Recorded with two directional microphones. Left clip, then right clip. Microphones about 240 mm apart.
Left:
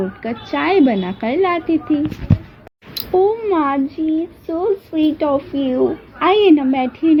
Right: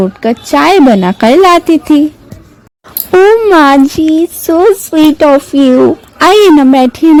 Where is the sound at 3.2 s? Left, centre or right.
Right.